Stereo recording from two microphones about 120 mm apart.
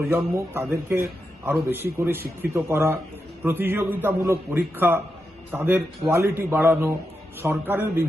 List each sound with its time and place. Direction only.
0.3 s a man's voice: 20° right (ahead or behind)